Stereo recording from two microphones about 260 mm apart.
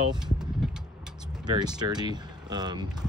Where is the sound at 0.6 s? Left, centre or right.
Centre.